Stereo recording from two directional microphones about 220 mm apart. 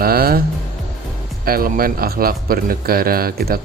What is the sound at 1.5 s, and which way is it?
Speech, 40° right (ahead or behind).